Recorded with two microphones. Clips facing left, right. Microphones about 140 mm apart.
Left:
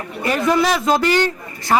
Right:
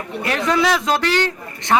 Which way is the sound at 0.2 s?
5° left (ahead or behind).